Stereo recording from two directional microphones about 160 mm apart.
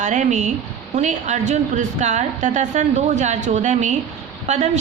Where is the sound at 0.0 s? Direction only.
50° right (ahead or behind).